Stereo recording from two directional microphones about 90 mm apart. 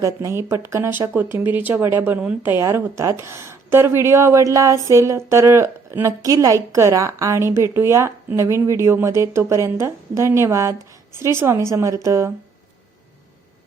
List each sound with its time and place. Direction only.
0.0 s speech: 35° right (ahead or behind); by 2.5 s 15° right (ahead or behind)
2.5 s a woman's voice: 30° right (ahead or behind)